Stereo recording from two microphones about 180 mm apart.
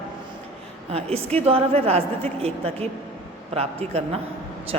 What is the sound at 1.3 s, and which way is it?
A woman's voice, 35° right (ahead or behind).